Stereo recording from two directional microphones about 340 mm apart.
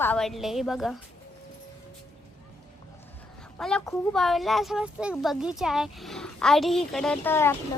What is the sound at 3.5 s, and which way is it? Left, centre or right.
Speech, centre.